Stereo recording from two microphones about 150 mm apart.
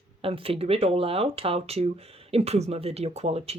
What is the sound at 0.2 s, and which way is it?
Speech, 40° right (ahead or behind).